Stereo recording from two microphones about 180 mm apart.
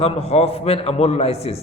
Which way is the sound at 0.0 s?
35° left (ahead or behind).